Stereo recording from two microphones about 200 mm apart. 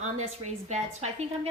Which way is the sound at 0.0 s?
35° right (ahead or behind).